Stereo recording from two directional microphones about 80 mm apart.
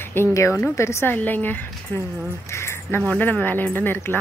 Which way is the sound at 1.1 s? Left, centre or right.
Left.